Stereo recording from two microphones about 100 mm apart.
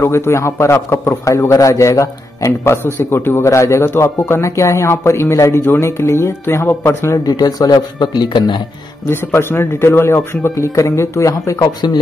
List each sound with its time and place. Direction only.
0.0 s speech: 25° left (ahead or behind); by 8.6 s 50° left (ahead or behind)
9.0 s speech: 25° left (ahead or behind)